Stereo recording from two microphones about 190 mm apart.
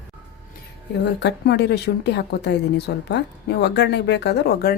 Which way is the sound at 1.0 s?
65° left (ahead or behind).